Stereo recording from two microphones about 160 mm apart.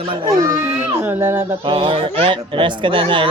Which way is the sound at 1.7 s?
35° right (ahead or behind).